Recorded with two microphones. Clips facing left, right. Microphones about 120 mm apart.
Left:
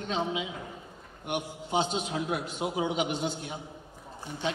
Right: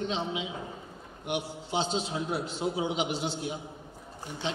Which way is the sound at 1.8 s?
30° right (ahead or behind).